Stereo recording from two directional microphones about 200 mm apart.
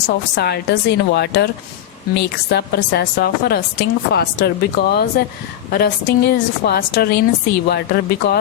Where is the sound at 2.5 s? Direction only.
55° left (ahead or behind).